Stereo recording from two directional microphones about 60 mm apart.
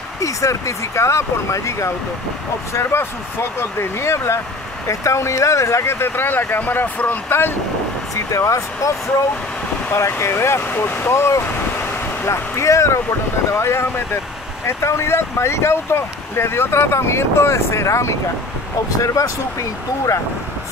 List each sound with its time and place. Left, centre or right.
0.2 s speech: left
2.7 s speech: left
8.1 s speech: left
9.9 s speech: left
10.6 s speech: left
18.9 s speech: left